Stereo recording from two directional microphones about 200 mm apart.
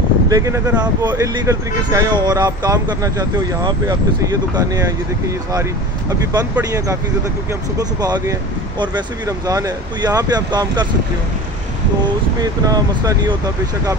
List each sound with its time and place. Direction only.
0.3 s speech: 15° right (ahead or behind)
8.0 s speech: 20° right (ahead or behind)
12.4 s speech: 20° right (ahead or behind)